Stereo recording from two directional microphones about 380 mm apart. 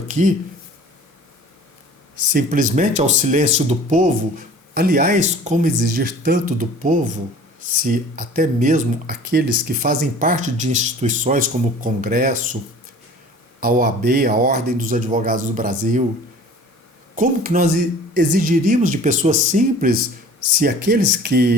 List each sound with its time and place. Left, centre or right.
0.1 s speech: centre
2.3 s speech: right
13.6 s speech: right
17.2 s speech: right